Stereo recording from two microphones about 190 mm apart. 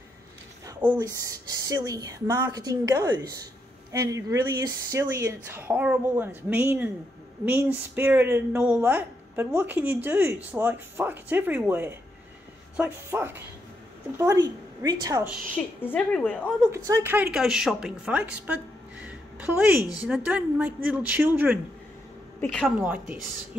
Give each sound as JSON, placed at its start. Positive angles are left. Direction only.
{"t": 0.7, "sound": "a sound", "side_deg": -10}
{"t": 0.9, "sound": "speech", "side_deg": -20}
{"t": 15.5, "sound": "a woman's voice", "side_deg": 10}
{"t": 16.7, "sound": "speech", "side_deg": -15}
{"t": 22.4, "sound": "a woman's voice", "side_deg": 5}
{"t": 22.8, "sound": "speech", "side_deg": -10}